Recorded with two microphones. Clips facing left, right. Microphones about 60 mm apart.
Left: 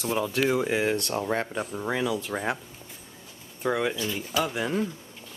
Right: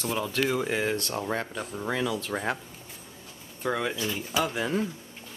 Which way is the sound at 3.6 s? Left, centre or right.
Centre.